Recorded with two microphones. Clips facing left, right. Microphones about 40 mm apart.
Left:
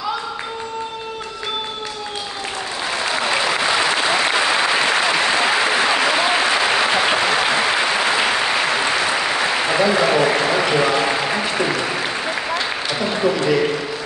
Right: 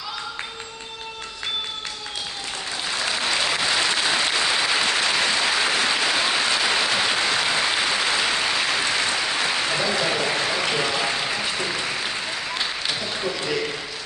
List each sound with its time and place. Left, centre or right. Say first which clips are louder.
3.1 s applause: left 4 dB; left
13.0 s applause: left 8 dB; left